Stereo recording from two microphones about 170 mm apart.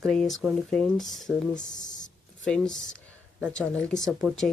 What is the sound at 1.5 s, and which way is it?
Speech, 45° left (ahead or behind).